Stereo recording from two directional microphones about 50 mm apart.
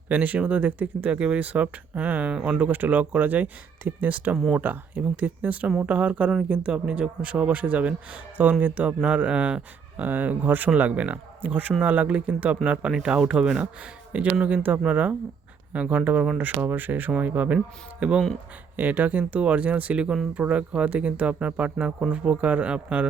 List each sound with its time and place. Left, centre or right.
0.1 s speech: right
9.0 s speech: right
10.0 s speech: right
12.9 s speech: centre
14.4 s speech: right
18.0 s speech: right
18.8 s speech: right